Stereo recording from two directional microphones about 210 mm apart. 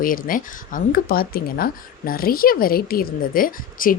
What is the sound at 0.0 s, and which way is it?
Speech, 40° left (ahead or behind).